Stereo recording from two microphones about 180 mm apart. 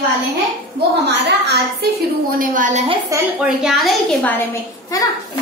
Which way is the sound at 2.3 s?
45° right (ahead or behind).